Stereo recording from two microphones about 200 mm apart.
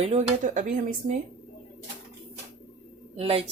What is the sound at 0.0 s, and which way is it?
Speech, 30° right (ahead or behind).